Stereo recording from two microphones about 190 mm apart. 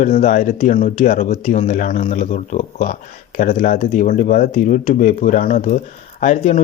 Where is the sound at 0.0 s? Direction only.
40° left (ahead or behind).